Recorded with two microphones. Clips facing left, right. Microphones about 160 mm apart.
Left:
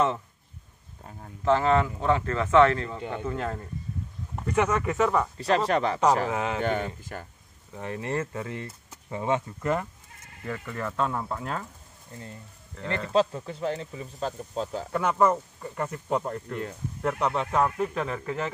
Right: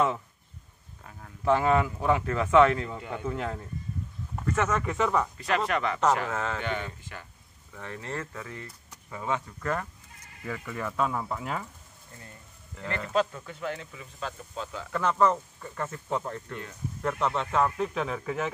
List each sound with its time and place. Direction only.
1.4 s speech: 15° right (ahead or behind)
4.5 s speech: 10° left (ahead or behind)
5.4 s speech: 30° left (ahead or behind)
6.3 s speech: 15° left (ahead or behind)
6.6 s speech: 45° left (ahead or behind)
7.7 s speech: 20° left (ahead or behind)
8.6 s a sound: 25° left (ahead or behind)
9.6 s speech: 15° left (ahead or behind)
10.4 s speech: centre (ahead or behind)
13.1 s speech: 30° left (ahead or behind)
14.9 s speech: 10° left (ahead or behind)